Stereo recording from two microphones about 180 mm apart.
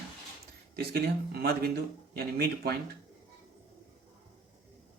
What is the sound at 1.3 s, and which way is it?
Speech, 60° right (ahead or behind).